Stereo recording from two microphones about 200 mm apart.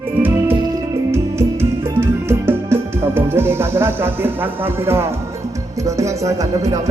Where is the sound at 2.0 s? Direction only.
10° right (ahead or behind).